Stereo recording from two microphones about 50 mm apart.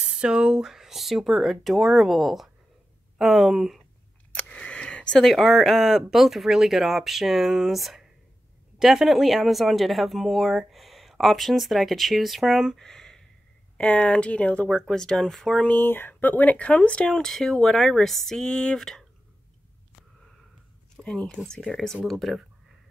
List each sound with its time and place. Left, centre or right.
0.2 s speech: centre
4.5 s a sound: centre
5.2 s speech: centre
12.7 s a sound: centre
13.7 s speech: left
14.7 s speech: centre
15.8 s speech: left; by 19.0 s centre
20.9 s a sound: centre
21.7 s speech: centre